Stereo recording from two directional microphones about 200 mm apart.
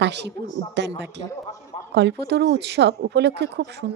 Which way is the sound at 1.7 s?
30° left (ahead or behind).